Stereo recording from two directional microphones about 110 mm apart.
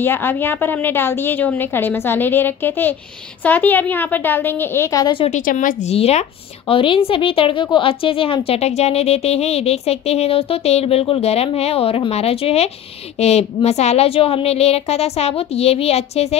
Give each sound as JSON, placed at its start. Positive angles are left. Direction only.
{"t": 0.0, "sound": "a woman's voice", "side_deg": 20}
{"t": 5.1, "sound": "speech", "side_deg": 75}
{"t": 6.7, "sound": "a woman's voice", "side_deg": 55}